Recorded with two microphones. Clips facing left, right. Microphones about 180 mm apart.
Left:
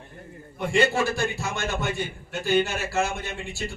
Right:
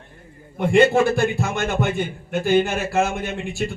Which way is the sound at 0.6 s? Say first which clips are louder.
Right 7 dB; 55° right (ahead or behind).